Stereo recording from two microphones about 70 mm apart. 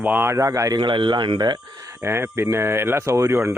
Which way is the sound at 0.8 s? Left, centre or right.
Right.